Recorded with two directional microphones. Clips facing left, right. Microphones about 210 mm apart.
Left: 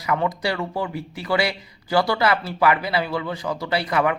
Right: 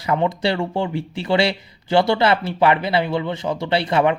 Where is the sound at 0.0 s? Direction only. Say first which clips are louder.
Right 3 dB; 30° right (ahead or behind).